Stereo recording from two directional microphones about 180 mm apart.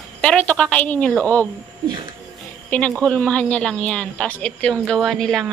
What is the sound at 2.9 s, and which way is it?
Speech, 5° left (ahead or behind).